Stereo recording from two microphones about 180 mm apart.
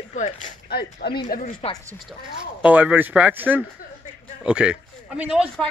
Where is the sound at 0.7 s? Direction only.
60° left (ahead or behind).